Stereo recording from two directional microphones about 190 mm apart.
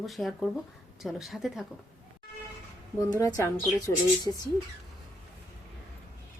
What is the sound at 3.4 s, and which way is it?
Speech, 15° left (ahead or behind).